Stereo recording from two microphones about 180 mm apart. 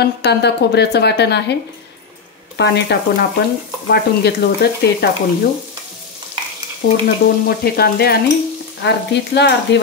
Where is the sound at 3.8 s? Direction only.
65° left (ahead or behind).